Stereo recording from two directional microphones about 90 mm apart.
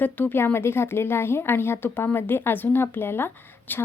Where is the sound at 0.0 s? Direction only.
20° left (ahead or behind).